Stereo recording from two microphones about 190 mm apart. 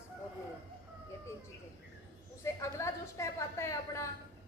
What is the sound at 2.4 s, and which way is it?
A woman's voice, 15° left (ahead or behind).